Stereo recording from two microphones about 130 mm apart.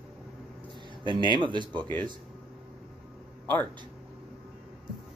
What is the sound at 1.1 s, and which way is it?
Speech, 35° left (ahead or behind).